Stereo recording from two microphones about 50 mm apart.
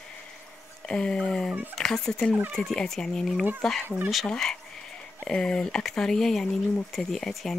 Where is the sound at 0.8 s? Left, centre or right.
Centre.